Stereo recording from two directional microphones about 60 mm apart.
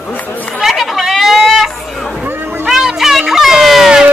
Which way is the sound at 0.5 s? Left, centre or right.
Centre.